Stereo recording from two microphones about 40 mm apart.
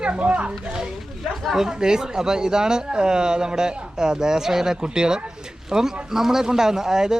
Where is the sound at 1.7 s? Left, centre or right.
Centre.